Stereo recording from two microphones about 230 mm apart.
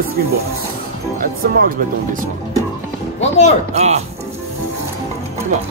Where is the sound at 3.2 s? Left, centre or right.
Left.